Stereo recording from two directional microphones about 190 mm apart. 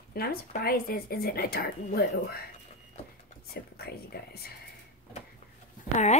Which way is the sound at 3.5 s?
55° left (ahead or behind).